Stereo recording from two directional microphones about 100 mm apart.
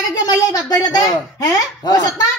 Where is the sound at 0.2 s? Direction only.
35° left (ahead or behind).